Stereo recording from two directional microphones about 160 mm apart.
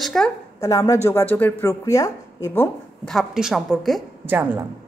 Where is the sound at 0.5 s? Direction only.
20° left (ahead or behind).